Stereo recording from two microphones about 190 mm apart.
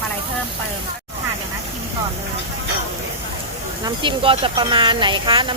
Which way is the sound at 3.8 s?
25° right (ahead or behind).